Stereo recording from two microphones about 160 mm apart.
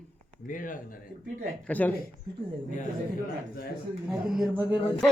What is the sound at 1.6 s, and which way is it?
Speech, 10° left (ahead or behind).